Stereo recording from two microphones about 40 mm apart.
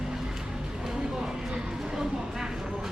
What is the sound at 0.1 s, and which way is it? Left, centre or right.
Vehicle, centre.